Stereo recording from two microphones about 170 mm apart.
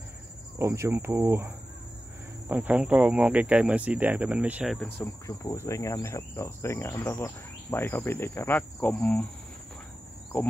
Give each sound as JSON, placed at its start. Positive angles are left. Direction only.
{"t": 0.6, "sound": "speech", "side_deg": -15}
{"t": 4.7, "sound": "cricket", "side_deg": 10}
{"t": 10.3, "sound": "cricket", "side_deg": 10}